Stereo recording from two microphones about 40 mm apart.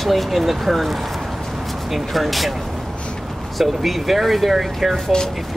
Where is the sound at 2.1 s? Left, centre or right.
Centre.